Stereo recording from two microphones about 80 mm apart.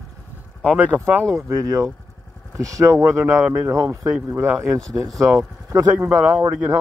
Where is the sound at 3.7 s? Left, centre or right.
Right.